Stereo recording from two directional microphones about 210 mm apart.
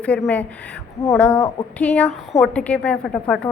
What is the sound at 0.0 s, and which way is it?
A woman's voice, 5° left (ahead or behind).